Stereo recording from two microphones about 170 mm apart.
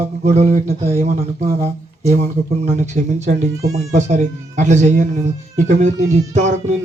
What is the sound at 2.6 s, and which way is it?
Speech, 40° right (ahead or behind).